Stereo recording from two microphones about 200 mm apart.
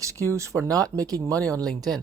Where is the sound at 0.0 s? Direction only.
15° right (ahead or behind).